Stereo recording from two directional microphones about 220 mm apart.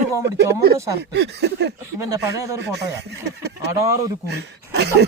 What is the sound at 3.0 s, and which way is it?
Speech, 50° right (ahead or behind).